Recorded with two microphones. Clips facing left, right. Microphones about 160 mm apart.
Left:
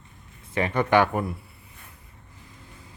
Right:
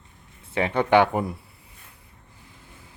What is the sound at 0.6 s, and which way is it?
Speech, 15° right (ahead or behind).